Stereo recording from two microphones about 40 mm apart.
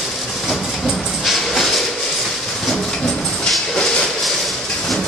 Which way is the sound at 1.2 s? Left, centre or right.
Centre.